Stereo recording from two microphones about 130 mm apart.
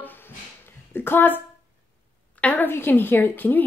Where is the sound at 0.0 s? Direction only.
15° left (ahead or behind).